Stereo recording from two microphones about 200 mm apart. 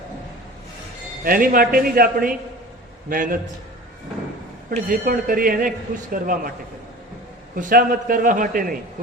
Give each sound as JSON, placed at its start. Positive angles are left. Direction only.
{"t": 1.2, "sound": "speech", "side_deg": -45}
{"t": 4.7, "sound": "speech", "side_deg": -45}
{"t": 7.5, "sound": "speech", "side_deg": -45}